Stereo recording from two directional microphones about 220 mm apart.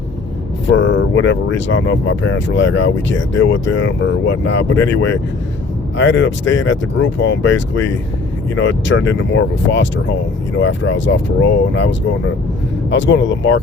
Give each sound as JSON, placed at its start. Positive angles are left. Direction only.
{"t": 0.7, "sound": "speech", "side_deg": 60}
{"t": 12.9, "sound": "speech", "side_deg": 55}